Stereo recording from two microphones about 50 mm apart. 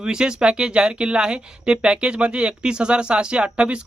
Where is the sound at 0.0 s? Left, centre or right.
Centre.